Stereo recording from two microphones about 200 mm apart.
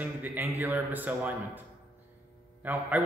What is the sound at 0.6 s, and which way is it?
A man's voice, 15° right (ahead or behind).